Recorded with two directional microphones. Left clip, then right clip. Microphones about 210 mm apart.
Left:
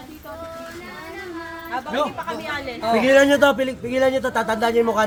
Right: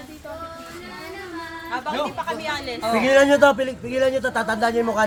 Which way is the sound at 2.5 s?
45° right (ahead or behind).